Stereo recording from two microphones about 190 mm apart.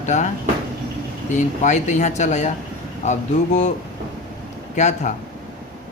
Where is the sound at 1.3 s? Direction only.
40° left (ahead or behind).